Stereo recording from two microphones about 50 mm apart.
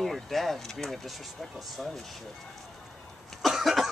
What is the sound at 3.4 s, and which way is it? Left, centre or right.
Cough, centre.